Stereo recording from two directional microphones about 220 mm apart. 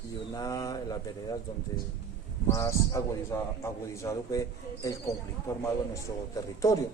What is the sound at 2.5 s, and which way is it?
A man's voice, 15° left (ahead or behind).